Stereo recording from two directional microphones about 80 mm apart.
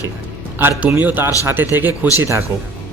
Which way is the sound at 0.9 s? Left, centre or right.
Right.